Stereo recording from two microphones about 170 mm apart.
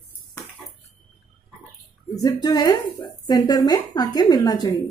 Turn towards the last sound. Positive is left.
turn(degrees=20)  # may be behind; listen again after turning